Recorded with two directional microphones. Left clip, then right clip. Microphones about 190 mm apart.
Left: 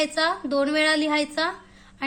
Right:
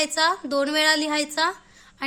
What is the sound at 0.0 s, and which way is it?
A woman's voice, 30° right (ahead or behind).